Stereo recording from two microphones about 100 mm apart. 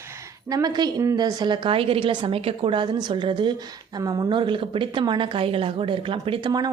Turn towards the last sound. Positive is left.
turn(degrees=-50)  # may be behind; listen again after turning